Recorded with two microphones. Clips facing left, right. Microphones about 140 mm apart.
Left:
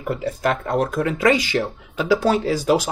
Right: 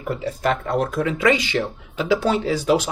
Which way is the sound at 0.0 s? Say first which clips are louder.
Left 1 dB; 45° left (ahead or behind).